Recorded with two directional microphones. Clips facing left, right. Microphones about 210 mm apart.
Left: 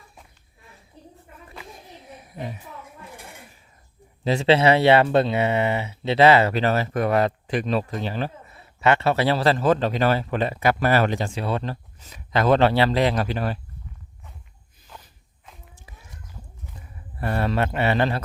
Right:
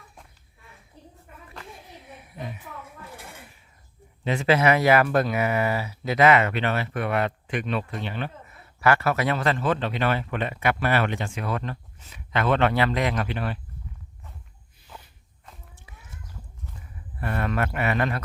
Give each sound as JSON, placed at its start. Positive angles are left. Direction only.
{"t": 1.7, "sound": "a sound", "side_deg": 40}
{"t": 4.2, "sound": "speech", "side_deg": 30}
{"t": 17.2, "sound": "speech", "side_deg": 30}